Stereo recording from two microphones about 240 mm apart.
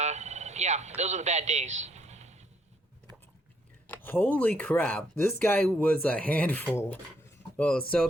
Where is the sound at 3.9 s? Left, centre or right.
Centre.